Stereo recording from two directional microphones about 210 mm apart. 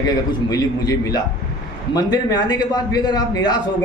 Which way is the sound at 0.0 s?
20° left (ahead or behind).